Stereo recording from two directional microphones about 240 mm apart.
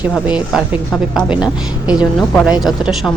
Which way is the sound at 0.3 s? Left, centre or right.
Centre.